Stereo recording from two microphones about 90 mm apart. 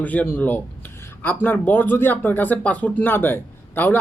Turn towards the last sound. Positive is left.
turn(degrees=20)  # may be behind; listen again after turning